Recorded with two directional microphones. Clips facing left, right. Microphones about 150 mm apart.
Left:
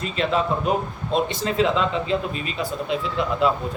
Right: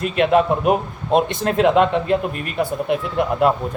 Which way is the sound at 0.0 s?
60° right (ahead or behind).